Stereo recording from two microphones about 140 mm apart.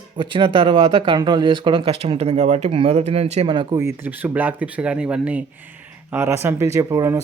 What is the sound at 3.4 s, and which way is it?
Speech, 35° right (ahead or behind).